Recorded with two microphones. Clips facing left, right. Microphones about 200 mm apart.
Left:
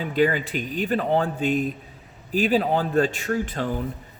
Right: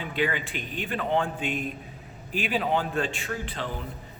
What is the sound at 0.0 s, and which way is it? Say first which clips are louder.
A man's voice: left 7 dB; 40° left (ahead or behind).